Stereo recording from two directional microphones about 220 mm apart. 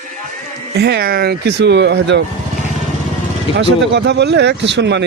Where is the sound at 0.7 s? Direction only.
45° right (ahead or behind).